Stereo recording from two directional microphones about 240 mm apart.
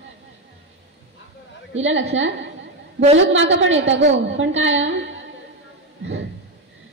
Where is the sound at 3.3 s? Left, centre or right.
Right.